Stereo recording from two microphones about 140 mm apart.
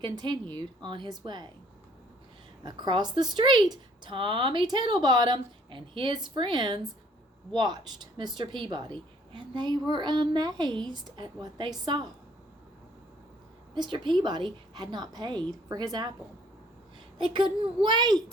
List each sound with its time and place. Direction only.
0.0 s a woman's voice: 30° right (ahead or behind)
2.6 s a woman's voice: 30° right (ahead or behind)
13.7 s a woman's voice: 35° right (ahead or behind)
17.2 s a woman's voice: 35° right (ahead or behind)